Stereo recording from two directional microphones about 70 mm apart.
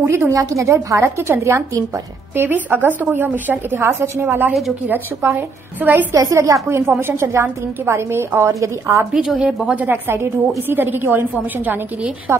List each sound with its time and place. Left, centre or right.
0.0 s a woman's voice: right
0.4 s a woman's voice: right
6.1 s a woman's voice: right
7.0 s a woman's voice: right
9.1 s a woman's voice: centre
9.8 s a woman's voice: right
12.3 s a woman's voice: right